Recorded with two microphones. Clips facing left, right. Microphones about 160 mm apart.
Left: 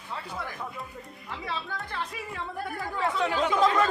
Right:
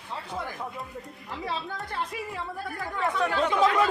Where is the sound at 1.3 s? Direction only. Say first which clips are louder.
Right 2 dB; 35° right (ahead or behind).